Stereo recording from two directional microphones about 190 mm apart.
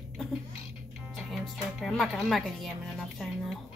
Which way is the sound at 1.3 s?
Centre (ahead or behind).